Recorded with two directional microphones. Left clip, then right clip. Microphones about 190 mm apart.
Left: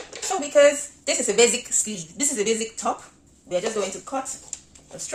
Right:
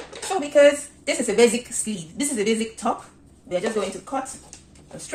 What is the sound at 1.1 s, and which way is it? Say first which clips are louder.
A woman's voice: right 1 dB; 25° left (ahead or behind).